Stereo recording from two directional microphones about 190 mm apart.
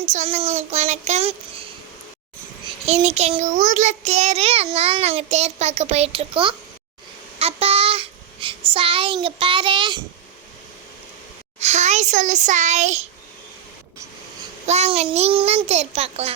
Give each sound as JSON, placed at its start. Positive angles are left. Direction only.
{"t": 0.0, "sound": "child singing", "side_deg": -35}
{"t": 2.8, "sound": "child singing", "side_deg": -35}
{"t": 11.6, "sound": "child singing", "side_deg": -35}
{"t": 14.7, "sound": "child singing", "side_deg": -35}